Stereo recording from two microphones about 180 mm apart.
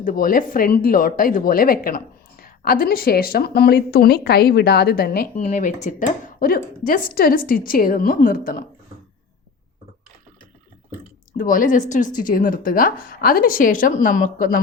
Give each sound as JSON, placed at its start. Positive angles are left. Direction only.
{"t": 0.0, "sound": "speech", "side_deg": 50}
{"t": 11.3, "sound": "speech", "side_deg": 50}